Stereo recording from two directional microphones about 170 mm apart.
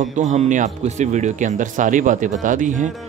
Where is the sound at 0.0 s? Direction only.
45° right (ahead or behind).